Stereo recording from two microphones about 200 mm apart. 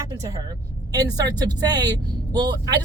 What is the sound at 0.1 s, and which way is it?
Speech, 15° right (ahead or behind).